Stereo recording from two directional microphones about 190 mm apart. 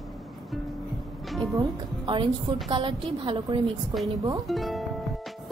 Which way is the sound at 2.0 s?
25° right (ahead or behind).